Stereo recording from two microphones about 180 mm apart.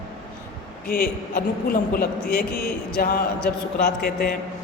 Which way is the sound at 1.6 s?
55° left (ahead or behind).